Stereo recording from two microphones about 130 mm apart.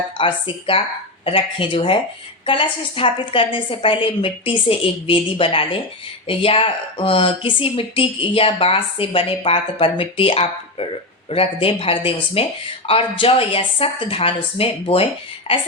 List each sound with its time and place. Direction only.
0.2 s speech: 45° left (ahead or behind)